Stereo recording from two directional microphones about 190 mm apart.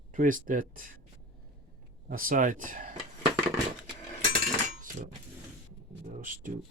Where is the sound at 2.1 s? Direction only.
50° right (ahead or behind).